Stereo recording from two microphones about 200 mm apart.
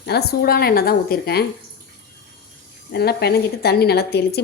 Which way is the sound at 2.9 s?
55° left (ahead or behind).